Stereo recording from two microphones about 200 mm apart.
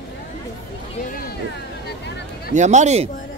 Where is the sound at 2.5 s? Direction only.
35° right (ahead or behind).